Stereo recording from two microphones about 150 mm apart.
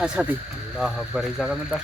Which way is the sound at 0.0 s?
5° right (ahead or behind).